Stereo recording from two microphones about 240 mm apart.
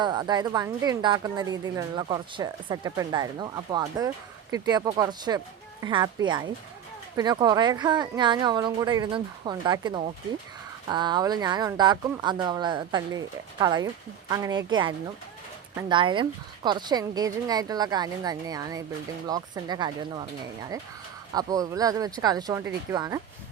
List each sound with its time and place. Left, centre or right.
0.0 s a woman's voice: centre